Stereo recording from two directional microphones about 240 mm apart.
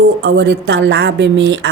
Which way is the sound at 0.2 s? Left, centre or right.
Right.